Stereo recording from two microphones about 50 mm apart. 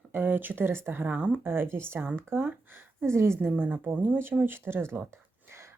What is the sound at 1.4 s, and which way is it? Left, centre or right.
Speech, right.